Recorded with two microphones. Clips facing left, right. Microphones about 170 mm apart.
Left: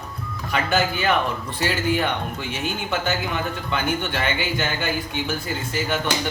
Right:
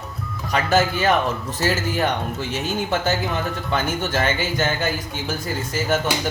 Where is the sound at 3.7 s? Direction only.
40° right (ahead or behind).